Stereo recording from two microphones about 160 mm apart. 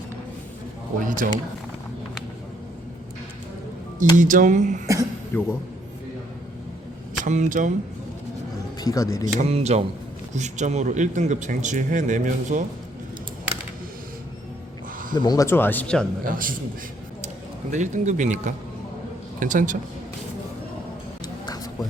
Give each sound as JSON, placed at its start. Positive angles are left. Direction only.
{"t": 0.9, "sound": "speech", "side_deg": -55}
{"t": 4.2, "sound": "speech", "side_deg": -55}
{"t": 5.3, "sound": "speech", "side_deg": 15}
{"t": 7.3, "sound": "speech", "side_deg": -50}
{"t": 8.8, "sound": "speech", "side_deg": 20}
{"t": 9.2, "sound": "speech", "side_deg": -45}
{"t": 15.1, "sound": "speech", "side_deg": 25}
{"t": 16.2, "sound": "speech", "side_deg": -60}
{"t": 17.7, "sound": "speech", "side_deg": -50}
{"t": 21.4, "sound": "a sound", "side_deg": 25}